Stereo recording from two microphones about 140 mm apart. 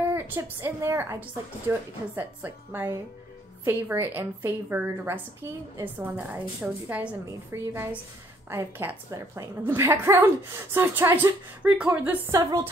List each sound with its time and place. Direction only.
0.1 s a woman's voice: 15° right (ahead or behind)
12.3 s a woman's voice: 25° right (ahead or behind)